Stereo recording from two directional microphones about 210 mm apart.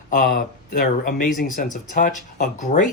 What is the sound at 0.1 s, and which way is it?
Speech, 45° left (ahead or behind).